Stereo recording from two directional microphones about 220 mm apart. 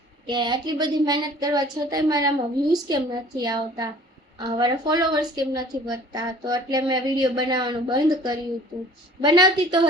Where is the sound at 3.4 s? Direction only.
15° right (ahead or behind).